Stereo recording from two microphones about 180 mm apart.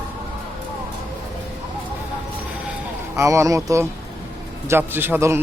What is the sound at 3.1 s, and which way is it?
Speech, 15° right (ahead or behind).